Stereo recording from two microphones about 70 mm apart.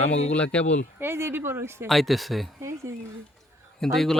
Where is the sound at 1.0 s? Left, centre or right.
Right.